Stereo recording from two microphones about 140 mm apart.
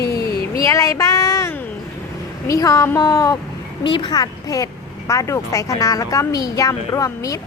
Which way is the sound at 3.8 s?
35° left (ahead or behind).